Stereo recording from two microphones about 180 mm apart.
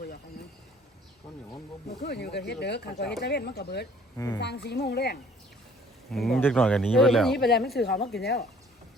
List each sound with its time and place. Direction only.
2.0 s speech: 65° left (ahead or behind)
6.1 s speech: centre (ahead or behind)
7.3 s speech: 60° left (ahead or behind)